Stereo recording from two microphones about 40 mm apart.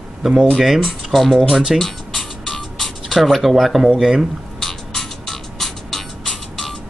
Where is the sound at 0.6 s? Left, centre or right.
Centre.